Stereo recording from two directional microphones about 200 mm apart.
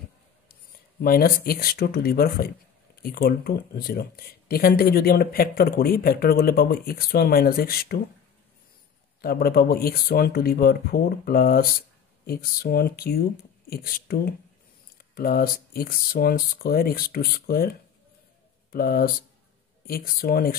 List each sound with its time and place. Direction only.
1.0 s speech: 50° left (ahead or behind)
9.2 s speech: 50° left (ahead or behind)